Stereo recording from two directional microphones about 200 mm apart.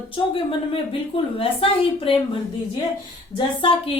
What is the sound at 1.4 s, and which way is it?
A woman's voice, 25° left (ahead or behind).